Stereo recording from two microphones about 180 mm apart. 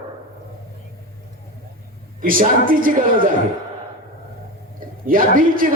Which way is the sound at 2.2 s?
50° right (ahead or behind).